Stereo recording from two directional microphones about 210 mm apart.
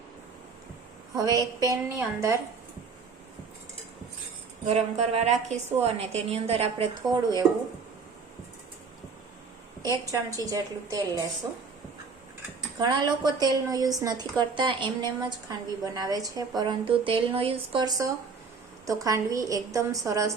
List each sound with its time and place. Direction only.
1.1 s a woman's voice: 15° right (ahead or behind)
4.6 s a woman's voice: 30° right (ahead or behind)
10.1 s a woman's voice: 15° right (ahead or behind)
12.8 s a woman's voice: 20° right (ahead or behind)